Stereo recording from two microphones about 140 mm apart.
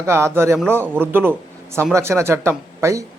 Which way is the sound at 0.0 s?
20° right (ahead or behind).